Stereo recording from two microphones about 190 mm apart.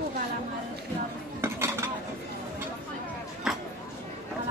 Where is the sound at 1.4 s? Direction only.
15° right (ahead or behind).